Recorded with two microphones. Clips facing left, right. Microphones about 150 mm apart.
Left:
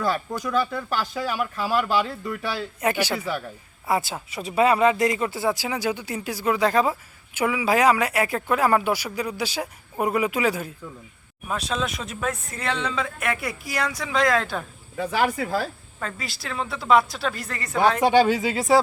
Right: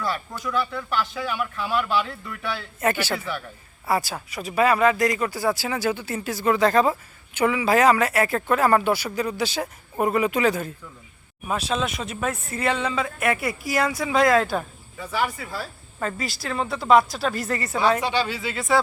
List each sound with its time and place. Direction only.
0.3 s speech: 45° left (ahead or behind)
2.8 s speech: 15° left (ahead or behind)
11.4 s speech: centre (ahead or behind)
14.9 s speech: 65° left (ahead or behind)
16.0 s speech: centre (ahead or behind)
18.0 s speech: 50° left (ahead or behind)